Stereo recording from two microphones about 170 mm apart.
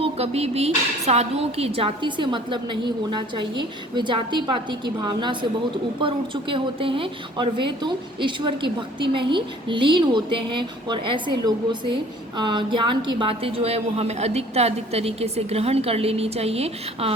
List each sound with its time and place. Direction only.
0.0 s a woman's voice: 40° right (ahead or behind)